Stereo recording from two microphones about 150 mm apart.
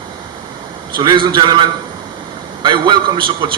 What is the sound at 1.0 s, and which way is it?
A man's voice, 30° right (ahead or behind).